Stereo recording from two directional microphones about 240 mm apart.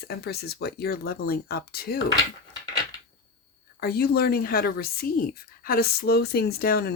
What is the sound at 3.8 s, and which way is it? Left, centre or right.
Speech, left.